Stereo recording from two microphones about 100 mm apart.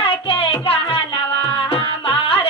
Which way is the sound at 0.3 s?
65° left (ahead or behind).